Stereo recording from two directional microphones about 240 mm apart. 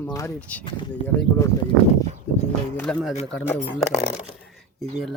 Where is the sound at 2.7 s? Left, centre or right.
Centre.